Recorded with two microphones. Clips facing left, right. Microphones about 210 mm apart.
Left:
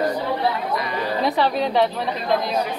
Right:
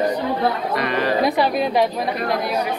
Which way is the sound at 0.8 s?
70° right (ahead or behind).